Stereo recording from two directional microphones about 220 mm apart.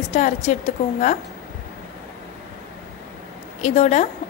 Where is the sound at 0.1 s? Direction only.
30° left (ahead or behind).